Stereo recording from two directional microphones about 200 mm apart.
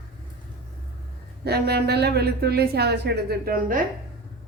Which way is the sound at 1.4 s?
55° right (ahead or behind).